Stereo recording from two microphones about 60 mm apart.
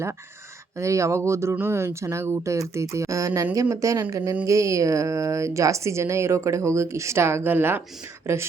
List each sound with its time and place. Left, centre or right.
0.8 s a woman's voice: right